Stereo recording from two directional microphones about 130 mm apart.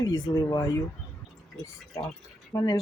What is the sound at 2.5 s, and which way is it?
Speech, 30° left (ahead or behind).